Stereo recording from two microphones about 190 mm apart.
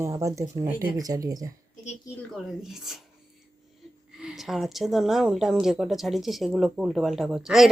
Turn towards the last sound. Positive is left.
turn(degrees=0)  # may be behind; listen again after turning